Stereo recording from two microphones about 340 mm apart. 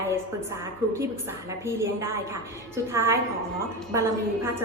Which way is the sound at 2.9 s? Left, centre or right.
Centre.